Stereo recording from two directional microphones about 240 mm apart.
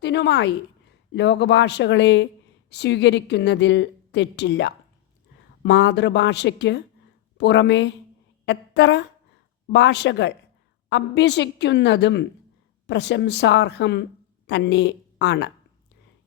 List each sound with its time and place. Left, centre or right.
0.0 s speech: left